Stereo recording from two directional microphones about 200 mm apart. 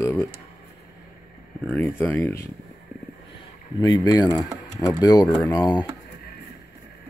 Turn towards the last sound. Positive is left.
turn(degrees=20)  # may be behind; listen again after turning